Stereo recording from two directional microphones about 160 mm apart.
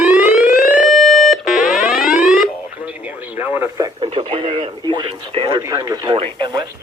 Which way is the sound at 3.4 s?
15° right (ahead or behind).